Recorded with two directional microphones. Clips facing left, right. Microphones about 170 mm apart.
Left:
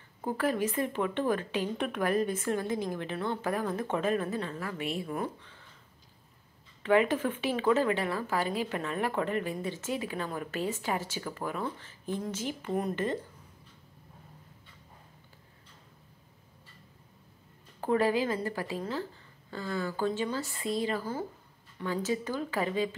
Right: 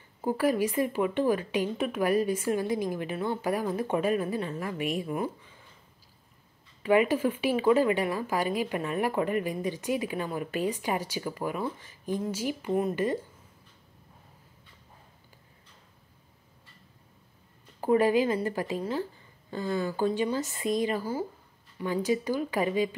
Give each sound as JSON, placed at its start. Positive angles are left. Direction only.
{"t": 0.2, "sound": "speech", "side_deg": -10}
{"t": 6.8, "sound": "speech", "side_deg": -10}
{"t": 17.7, "sound": "speech", "side_deg": -10}